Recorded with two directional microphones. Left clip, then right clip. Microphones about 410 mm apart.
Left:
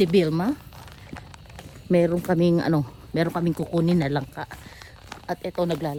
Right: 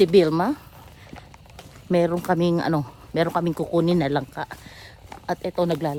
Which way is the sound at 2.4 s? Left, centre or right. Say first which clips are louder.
Even; centre.